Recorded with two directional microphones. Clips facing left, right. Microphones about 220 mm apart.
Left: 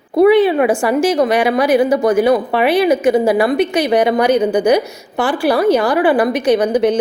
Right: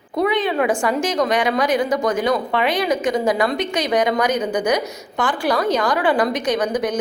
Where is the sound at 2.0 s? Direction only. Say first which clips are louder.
Left 7 dB; 5° left (ahead or behind).